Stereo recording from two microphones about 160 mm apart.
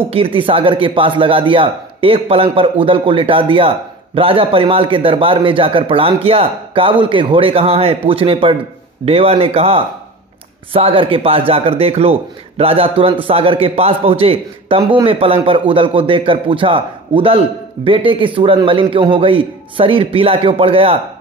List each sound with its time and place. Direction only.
0.1 s a man's voice: 35° right (ahead or behind)